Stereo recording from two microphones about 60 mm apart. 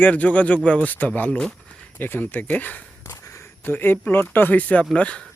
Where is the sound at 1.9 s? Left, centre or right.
Left.